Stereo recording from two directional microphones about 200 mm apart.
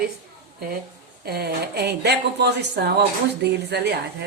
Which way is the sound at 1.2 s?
50° right (ahead or behind).